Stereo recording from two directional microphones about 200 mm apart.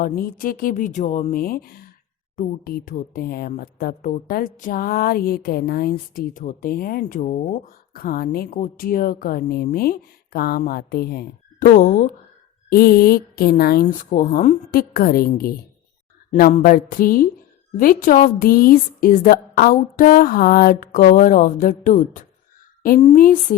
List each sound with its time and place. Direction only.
0.0 s a woman's voice: 45° left (ahead or behind)
23.2 s speech: 45° left (ahead or behind)